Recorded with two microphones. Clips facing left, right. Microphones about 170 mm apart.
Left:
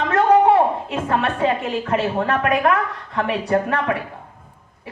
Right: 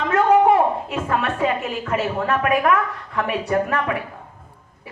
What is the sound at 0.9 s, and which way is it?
Speech, 30° left (ahead or behind).